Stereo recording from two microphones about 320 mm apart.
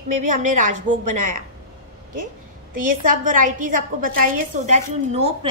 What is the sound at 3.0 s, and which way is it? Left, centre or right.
A woman's voice, right.